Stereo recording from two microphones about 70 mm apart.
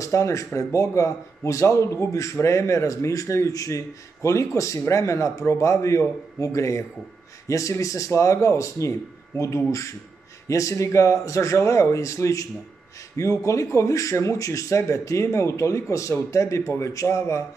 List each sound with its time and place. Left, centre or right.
0.0 s speech: left